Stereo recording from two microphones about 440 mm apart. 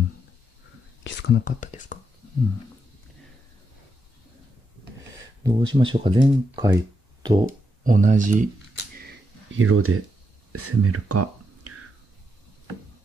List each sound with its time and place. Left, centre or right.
1.0 s speech: left
5.4 s speech: centre
8.9 s a sound: right
10.5 s speech: right